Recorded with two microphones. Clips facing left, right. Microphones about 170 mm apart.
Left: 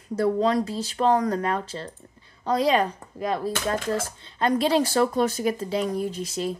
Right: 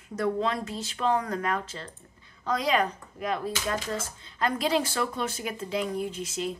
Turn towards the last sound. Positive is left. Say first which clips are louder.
# left 4 dB
turn(degrees=35)  # may be behind; listen again after turning